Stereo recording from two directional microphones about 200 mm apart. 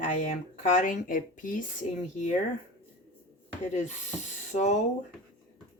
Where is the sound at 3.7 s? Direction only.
35° left (ahead or behind).